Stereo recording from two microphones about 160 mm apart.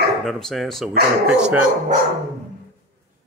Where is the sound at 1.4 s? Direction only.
10° right (ahead or behind).